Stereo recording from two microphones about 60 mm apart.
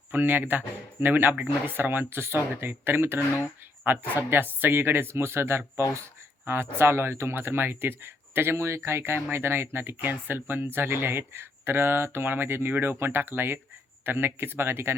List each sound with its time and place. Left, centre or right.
0.1 s speech: right